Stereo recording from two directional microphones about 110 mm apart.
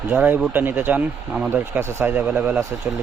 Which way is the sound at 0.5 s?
20° right (ahead or behind).